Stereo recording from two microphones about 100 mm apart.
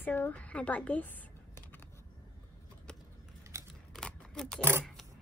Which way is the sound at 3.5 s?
30° right (ahead or behind).